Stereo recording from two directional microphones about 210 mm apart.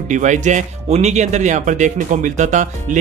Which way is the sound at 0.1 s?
35° right (ahead or behind).